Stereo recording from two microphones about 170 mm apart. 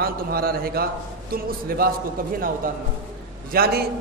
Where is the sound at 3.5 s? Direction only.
65° right (ahead or behind).